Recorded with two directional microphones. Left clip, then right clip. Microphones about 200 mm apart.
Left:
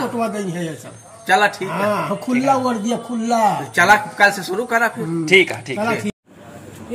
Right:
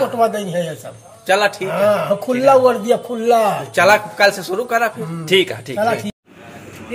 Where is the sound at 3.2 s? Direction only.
35° right (ahead or behind).